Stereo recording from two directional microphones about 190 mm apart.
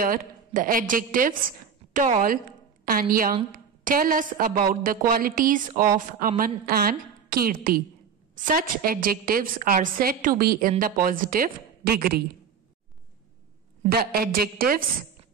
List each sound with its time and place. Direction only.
0.0 s a woman's voice: 45° right (ahead or behind)
13.8 s a woman's voice: 50° right (ahead or behind)